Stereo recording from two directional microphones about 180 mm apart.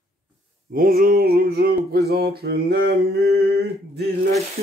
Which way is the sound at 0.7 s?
50° right (ahead or behind).